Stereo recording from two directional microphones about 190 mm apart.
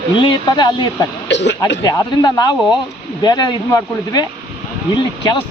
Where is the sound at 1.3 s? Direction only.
65° left (ahead or behind).